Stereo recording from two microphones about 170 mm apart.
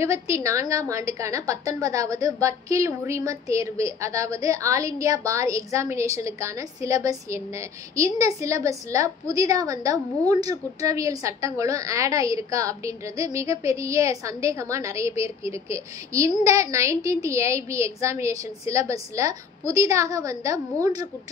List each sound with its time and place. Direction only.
0.0 s a woman's voice: 15° right (ahead or behind)